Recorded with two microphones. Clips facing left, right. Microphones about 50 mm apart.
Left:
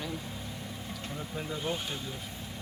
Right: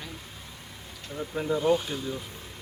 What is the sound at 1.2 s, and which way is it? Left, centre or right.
Speech, right.